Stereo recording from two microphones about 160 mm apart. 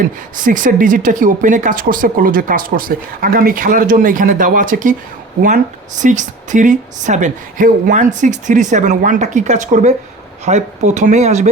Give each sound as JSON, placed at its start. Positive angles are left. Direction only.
{"t": 0.3, "sound": "speech", "side_deg": -55}
{"t": 6.0, "sound": "a woman's voice", "side_deg": -50}